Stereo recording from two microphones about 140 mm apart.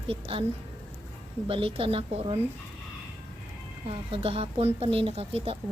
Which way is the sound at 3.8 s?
40° right (ahead or behind).